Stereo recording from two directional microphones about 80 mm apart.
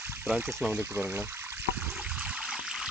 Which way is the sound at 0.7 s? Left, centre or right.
Right.